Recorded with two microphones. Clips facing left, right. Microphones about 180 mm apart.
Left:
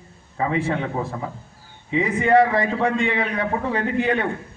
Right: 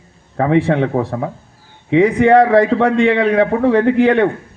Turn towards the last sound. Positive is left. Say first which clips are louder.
# right 10 dB
turn(degrees=-75)  # may be behind; listen again after turning